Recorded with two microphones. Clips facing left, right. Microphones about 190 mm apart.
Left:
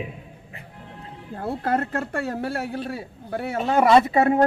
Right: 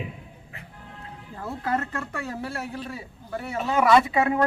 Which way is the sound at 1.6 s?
55° left (ahead or behind).